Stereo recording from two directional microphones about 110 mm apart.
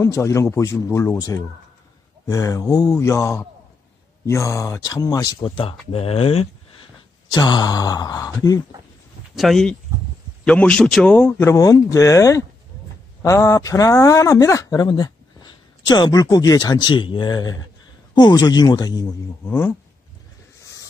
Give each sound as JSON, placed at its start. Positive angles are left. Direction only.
{"t": 0.0, "sound": "speech", "side_deg": 25}
{"t": 2.2, "sound": "speech", "side_deg": 30}
{"t": 4.3, "sound": "a sound", "side_deg": 30}
{"t": 5.6, "sound": "speech", "side_deg": 60}
{"t": 7.3, "sound": "a sound", "side_deg": 40}
{"t": 9.3, "sound": "a man's voice", "side_deg": 0}
{"t": 11.1, "sound": "speech", "side_deg": 20}
{"t": 11.5, "sound": "a sound", "side_deg": 30}
{"t": 13.2, "sound": "speech", "side_deg": 30}
{"t": 14.9, "sound": "speech", "side_deg": 40}
{"t": 18.1, "sound": "a sound", "side_deg": 40}
{"t": 19.4, "sound": "speech", "side_deg": 20}